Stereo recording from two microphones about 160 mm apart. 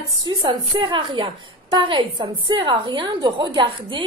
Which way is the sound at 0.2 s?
25° right (ahead or behind).